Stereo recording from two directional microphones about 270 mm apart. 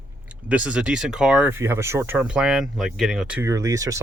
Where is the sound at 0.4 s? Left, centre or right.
Centre.